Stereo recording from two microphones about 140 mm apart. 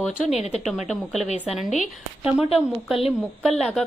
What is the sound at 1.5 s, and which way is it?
Speech, 55° left (ahead or behind).